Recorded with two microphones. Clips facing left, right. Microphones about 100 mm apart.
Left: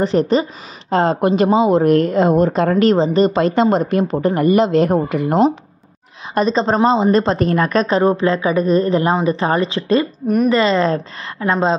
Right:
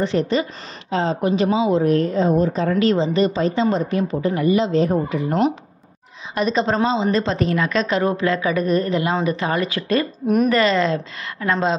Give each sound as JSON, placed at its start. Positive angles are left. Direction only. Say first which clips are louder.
{"t": 0.3, "sound": "a woman's voice", "louder": "left 4 dB", "side_deg": 45}
{"t": 2.7, "sound": "speech", "louder": "left 4 dB", "side_deg": 45}
{"t": 3.3, "sound": "speech", "louder": "left 5 dB", "side_deg": 60}
{"t": 6.3, "sound": "speech", "louder": "left 4 dB", "side_deg": 35}
{"t": 6.9, "sound": "a woman's voice", "louder": "left 5 dB", "side_deg": 50}
{"t": 8.0, "sound": "a woman's voice", "louder": "left 4 dB", "side_deg": 30}
{"t": 10.2, "sound": "a woman's voice", "louder": "left 2 dB", "side_deg": 0}
{"t": 10.5, "sound": "a woman's voice", "louder": "left 3 dB", "side_deg": 30}